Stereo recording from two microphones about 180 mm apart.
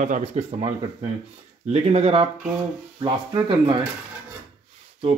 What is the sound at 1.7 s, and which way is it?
Speech, 35° right (ahead or behind).